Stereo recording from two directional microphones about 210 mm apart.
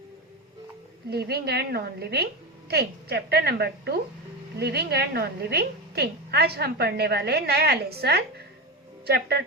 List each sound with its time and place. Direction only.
1.1 s a woman's voice: 50° right (ahead or behind)